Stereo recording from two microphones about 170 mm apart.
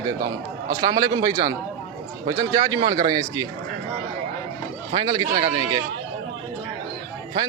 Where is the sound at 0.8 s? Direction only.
20° right (ahead or behind).